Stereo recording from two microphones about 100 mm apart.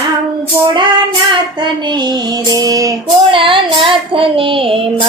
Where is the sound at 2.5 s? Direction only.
35° right (ahead or behind).